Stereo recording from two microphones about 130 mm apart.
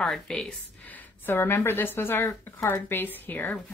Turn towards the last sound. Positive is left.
turn(degrees=10)  # may be behind; listen again after turning